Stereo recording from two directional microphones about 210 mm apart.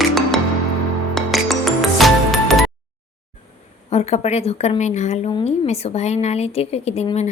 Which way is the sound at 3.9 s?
30° left (ahead or behind).